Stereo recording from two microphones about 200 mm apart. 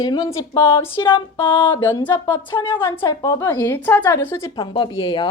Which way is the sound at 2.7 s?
10° left (ahead or behind).